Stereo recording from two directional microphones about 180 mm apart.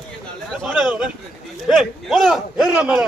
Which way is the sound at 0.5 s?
Centre (ahead or behind).